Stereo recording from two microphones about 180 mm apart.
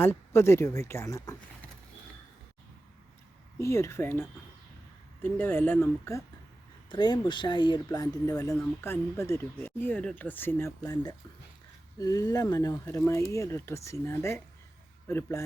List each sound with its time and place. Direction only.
0.0 s speech: 15° left (ahead or behind)
3.6 s speech: 15° left (ahead or behind)
6.9 s speech: 25° left (ahead or behind)